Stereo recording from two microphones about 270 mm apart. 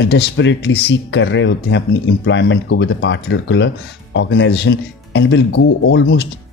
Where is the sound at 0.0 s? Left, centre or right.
Left.